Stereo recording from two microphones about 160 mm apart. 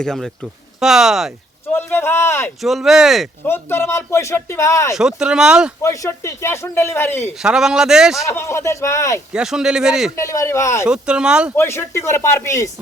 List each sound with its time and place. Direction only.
0.0 s speech: 5° left (ahead or behind)
1.7 s speech: 15° left (ahead or behind)
2.6 s speech: centre (ahead or behind)
3.4 s speech: 15° left (ahead or behind)
4.9 s speech: 5° right (ahead or behind)
5.8 s speech: 20° left (ahead or behind)
7.3 s speech: 5° right (ahead or behind)
8.2 s a man's voice: 15° left (ahead or behind)
9.3 s speech: 5° right (ahead or behind)
10.2 s speech: 20° left (ahead or behind)
10.8 s speech: 5° right (ahead or behind)
11.5 s speech: 15° left (ahead or behind)